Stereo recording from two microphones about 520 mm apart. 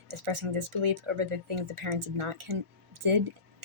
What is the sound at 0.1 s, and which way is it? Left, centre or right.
Speech, right.